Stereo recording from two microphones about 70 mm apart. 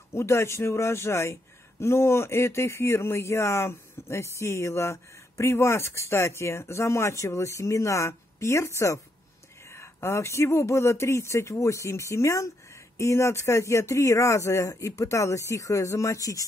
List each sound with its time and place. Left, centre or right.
0.1 s speech: left